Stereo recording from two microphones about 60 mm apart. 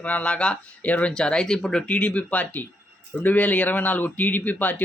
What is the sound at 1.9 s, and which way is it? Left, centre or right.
Speech, left.